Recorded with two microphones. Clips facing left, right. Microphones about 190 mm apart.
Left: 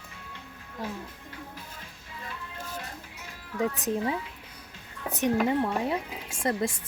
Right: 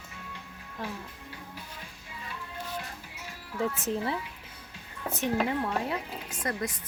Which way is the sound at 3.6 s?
15° left (ahead or behind).